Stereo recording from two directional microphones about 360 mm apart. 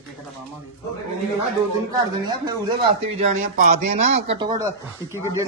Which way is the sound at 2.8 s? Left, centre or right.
Centre.